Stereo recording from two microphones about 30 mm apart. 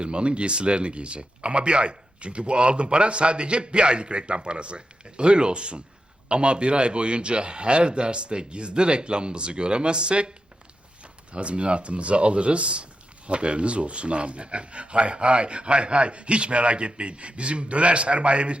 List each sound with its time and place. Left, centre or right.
0.0 s speech: right